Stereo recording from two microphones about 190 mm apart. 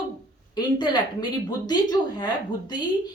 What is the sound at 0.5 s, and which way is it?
A woman's voice, 20° left (ahead or behind).